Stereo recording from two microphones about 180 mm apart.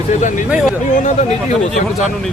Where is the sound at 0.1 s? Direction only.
45° left (ahead or behind).